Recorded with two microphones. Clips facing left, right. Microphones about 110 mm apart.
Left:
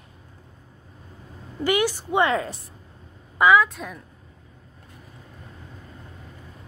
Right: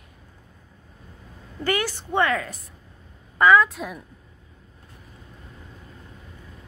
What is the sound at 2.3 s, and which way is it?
Speech, 30° left (ahead or behind).